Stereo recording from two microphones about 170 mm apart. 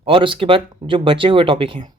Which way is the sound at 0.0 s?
30° right (ahead or behind).